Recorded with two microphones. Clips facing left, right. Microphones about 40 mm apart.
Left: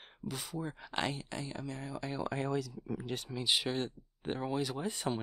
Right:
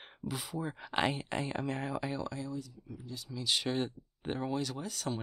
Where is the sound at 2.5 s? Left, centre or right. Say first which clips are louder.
Left 6 dB; left.